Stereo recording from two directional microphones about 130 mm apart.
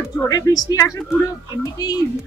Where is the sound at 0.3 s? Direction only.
30° left (ahead or behind).